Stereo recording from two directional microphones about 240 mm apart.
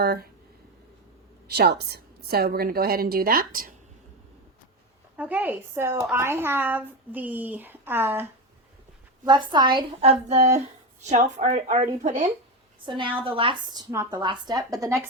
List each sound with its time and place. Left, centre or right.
0.0 s a woman's voice: right
1.5 s a woman's voice: right
5.1 s a woman's voice: centre